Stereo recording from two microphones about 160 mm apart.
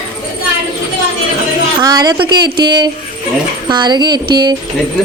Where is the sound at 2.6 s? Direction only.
25° right (ahead or behind).